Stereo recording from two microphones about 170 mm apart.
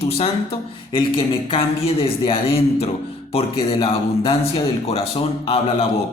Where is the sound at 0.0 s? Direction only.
35° left (ahead or behind).